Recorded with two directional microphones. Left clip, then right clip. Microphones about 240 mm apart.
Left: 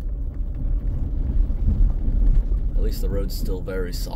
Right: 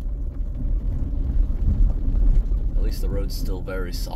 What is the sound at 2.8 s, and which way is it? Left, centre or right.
Speech, left.